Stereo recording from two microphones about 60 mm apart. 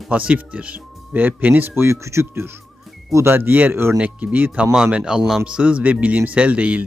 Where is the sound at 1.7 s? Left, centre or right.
Right.